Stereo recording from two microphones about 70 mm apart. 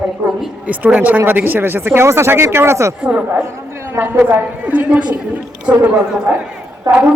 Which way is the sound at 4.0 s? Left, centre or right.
Right.